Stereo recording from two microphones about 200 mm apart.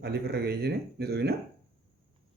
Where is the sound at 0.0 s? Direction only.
55° right (ahead or behind).